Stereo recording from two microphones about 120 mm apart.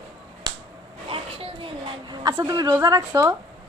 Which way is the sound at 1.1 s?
50° right (ahead or behind).